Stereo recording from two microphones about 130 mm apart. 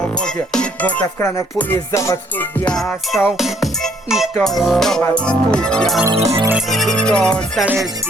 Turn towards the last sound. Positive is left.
turn(degrees=5)  # may be behind; listen again after turning